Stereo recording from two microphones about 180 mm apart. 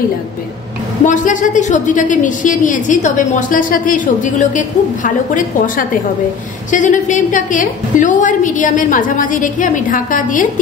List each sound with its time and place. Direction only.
1.0 s a woman's voice: 45° left (ahead or behind)